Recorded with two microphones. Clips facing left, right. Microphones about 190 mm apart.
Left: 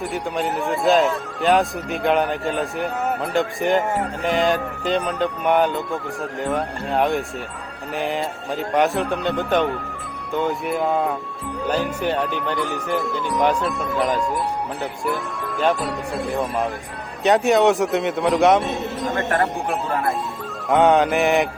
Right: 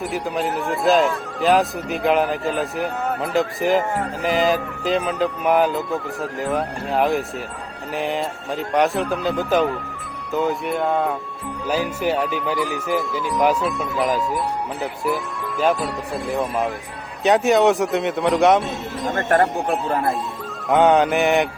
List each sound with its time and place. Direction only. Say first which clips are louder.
0.0 s speech: right 1 dB; centre (ahead or behind)
19.1 s speech: right 4 dB; 45° right (ahead or behind)
19.9 s speech: even; 30° right (ahead or behind)
20.7 s speech: even; centre (ahead or behind)